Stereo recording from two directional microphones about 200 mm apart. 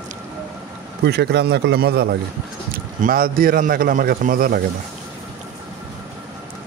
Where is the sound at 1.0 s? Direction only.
55° right (ahead or behind).